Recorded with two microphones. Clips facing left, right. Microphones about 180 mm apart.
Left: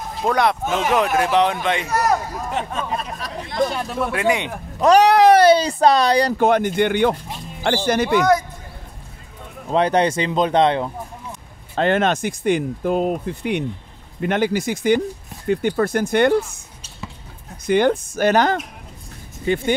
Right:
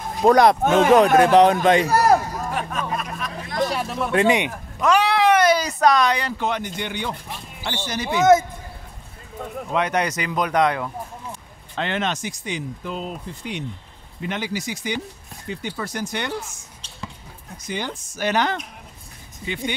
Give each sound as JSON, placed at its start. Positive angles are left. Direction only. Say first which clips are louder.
{"t": 0.2, "sound": "a man's voice", "louder": "right 5 dB", "side_deg": -40}
{"t": 2.5, "sound": "speech", "louder": "left 3 dB", "side_deg": 25}
{"t": 4.1, "sound": "speech", "louder": "right 3 dB", "side_deg": -30}
{"t": 4.7, "sound": "speech", "louder": "left 6 dB", "side_deg": 40}
{"t": 8.2, "sound": "speech", "louder": "right 8 dB", "side_deg": -25}
{"t": 9.7, "sound": "speech", "louder": "left 6 dB", "side_deg": 30}
{"t": 11.7, "sound": "speech", "louder": "left 7 dB", "side_deg": 45}
{"t": 17.6, "sound": "speech", "louder": "left 13 dB", "side_deg": 60}